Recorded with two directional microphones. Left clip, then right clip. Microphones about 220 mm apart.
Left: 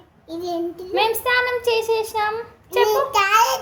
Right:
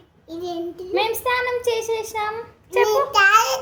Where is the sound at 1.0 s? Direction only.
Centre (ahead or behind).